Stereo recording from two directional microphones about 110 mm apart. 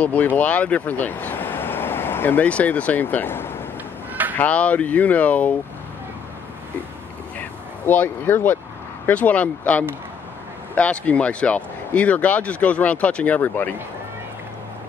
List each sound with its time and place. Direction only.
0.0 s speech: 15° left (ahead or behind)
4.1 s a sound: 15° right (ahead or behind)
4.4 s speech: 15° left (ahead or behind)
7.8 s speech: 15° left (ahead or behind)